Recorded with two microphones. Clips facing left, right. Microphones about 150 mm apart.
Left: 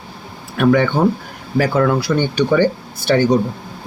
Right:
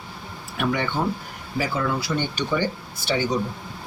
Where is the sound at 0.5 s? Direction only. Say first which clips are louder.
Left 10 dB; 90° left; by 2.6 s 70° left (ahead or behind).